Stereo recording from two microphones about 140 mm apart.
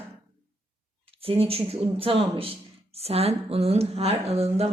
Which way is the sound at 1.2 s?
45° right (ahead or behind).